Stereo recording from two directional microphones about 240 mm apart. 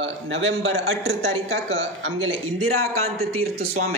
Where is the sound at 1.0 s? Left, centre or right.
Right.